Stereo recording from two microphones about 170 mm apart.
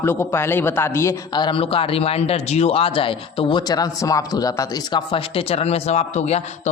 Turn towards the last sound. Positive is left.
turn(degrees=40)  # may be behind; listen again after turning